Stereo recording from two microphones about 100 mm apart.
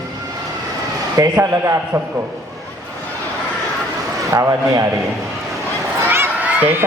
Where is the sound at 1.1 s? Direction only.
35° right (ahead or behind).